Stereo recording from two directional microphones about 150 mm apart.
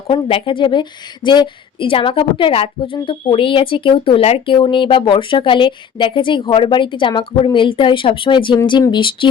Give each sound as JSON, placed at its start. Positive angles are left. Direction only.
{"t": 0.1, "sound": "speech", "side_deg": 35}